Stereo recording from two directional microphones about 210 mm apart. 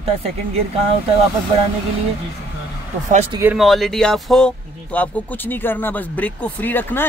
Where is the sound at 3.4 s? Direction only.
5° right (ahead or behind).